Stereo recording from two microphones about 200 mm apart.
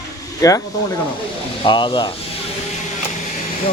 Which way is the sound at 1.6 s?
25° left (ahead or behind).